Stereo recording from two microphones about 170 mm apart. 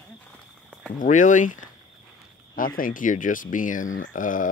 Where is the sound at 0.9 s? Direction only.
50° left (ahead or behind).